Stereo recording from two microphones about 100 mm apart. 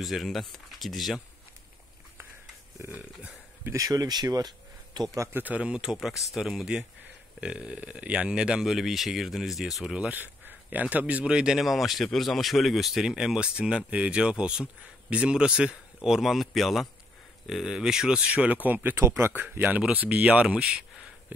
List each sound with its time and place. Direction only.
0.0 s speech: centre (ahead or behind)
2.9 s a sound: 15° right (ahead or behind)
3.7 s speech: 35° right (ahead or behind)
5.3 s speech: 15° right (ahead or behind)